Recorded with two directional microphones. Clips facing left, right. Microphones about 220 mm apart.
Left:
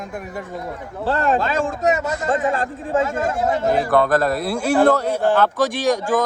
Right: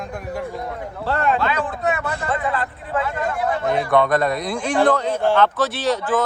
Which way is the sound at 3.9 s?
Centre (ahead or behind).